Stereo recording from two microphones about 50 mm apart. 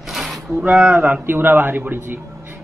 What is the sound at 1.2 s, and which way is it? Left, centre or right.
Speech, right.